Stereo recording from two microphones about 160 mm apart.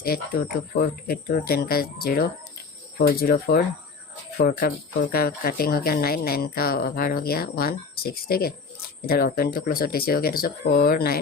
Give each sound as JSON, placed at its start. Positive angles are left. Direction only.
{"t": 0.0, "sound": "speech", "side_deg": 65}